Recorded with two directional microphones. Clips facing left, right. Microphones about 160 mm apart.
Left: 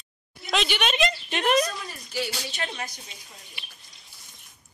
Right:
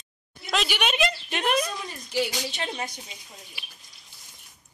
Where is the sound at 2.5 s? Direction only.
30° right (ahead or behind).